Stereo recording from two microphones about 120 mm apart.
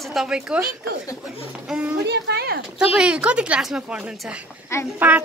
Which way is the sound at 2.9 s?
10° right (ahead or behind).